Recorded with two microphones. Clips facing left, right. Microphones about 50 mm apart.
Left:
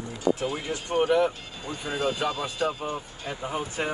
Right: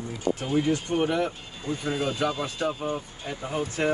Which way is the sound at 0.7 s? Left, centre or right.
Centre.